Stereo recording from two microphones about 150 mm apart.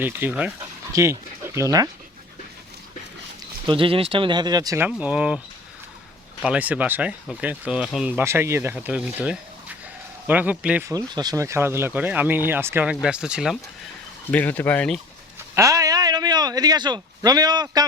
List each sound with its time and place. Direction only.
0.0 s speech: 10° right (ahead or behind)
3.7 s speech: 35° right (ahead or behind)
4.8 s speech: 10° right (ahead or behind)
6.4 s speech: 10° right (ahead or behind)
10.8 s speech: 25° right (ahead or behind); by 13.6 s 5° right (ahead or behind)
14.3 s speech: 10° left (ahead or behind)
15.5 s a sound: 20° right (ahead or behind)